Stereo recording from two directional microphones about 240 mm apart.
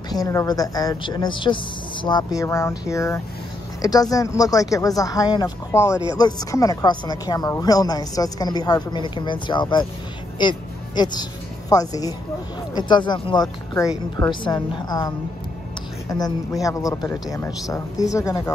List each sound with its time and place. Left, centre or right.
0.1 s speech: centre